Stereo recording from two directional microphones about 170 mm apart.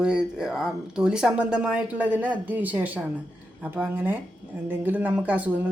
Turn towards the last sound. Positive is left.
turn(degrees=-10)  # may be behind; listen again after turning